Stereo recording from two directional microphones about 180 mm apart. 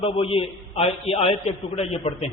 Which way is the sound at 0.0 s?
30° left (ahead or behind).